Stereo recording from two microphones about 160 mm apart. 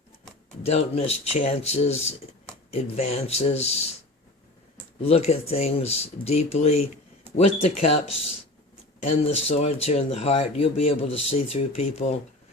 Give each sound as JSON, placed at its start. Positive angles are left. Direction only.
{"t": 0.6, "sound": "speech", "side_deg": 40}
{"t": 5.0, "sound": "speech", "side_deg": 40}